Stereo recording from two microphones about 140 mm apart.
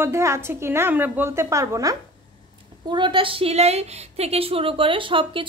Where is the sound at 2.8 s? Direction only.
35° right (ahead or behind).